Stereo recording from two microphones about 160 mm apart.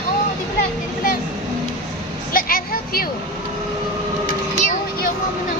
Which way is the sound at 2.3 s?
65° left (ahead or behind).